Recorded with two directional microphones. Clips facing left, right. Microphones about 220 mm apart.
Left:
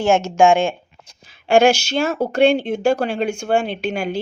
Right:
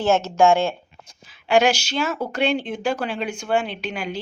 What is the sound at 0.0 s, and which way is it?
Speech, 15° left (ahead or behind).